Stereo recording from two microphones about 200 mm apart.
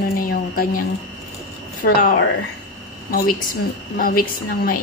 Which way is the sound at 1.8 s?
45° left (ahead or behind).